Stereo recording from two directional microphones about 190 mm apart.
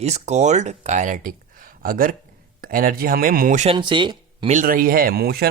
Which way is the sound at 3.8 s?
25° right (ahead or behind).